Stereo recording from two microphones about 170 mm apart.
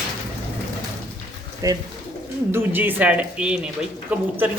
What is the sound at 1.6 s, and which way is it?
Speech, 20° right (ahead or behind).